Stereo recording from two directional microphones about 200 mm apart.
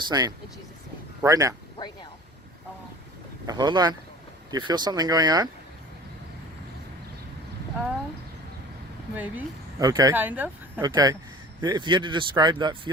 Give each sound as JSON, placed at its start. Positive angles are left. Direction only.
{"t": 0.1, "sound": "speech", "side_deg": -20}
{"t": 1.8, "sound": "speech", "side_deg": 20}
{"t": 3.4, "sound": "speech", "side_deg": -20}
{"t": 9.1, "sound": "speech", "side_deg": -10}
{"t": 9.8, "sound": "speech", "side_deg": -20}